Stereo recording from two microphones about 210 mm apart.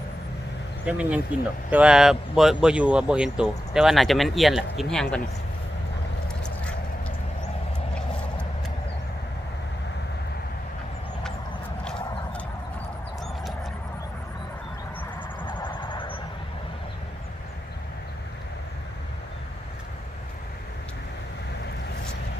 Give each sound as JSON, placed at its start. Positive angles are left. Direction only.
{"t": 0.9, "sound": "speech", "side_deg": -5}
{"t": 11.9, "sound": "horse", "side_deg": 5}
{"t": 15.4, "sound": "vehicle", "side_deg": 20}